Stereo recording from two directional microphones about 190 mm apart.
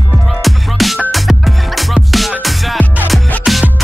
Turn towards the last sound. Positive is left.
turn(degrees=0)  # may be behind; listen again after turning